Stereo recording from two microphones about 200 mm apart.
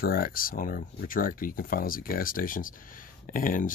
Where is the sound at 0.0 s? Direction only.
50° left (ahead or behind).